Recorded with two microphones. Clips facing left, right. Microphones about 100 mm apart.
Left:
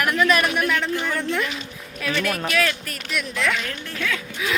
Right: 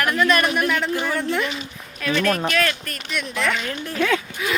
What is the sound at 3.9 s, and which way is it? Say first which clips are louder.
Speech: right 7 dB; 35° right (ahead or behind).